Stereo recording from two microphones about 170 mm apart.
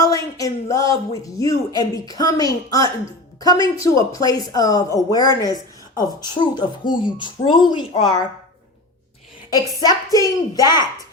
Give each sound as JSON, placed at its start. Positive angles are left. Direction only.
{"t": 0.0, "sound": "speech", "side_deg": 20}
{"t": 9.5, "sound": "speech", "side_deg": 20}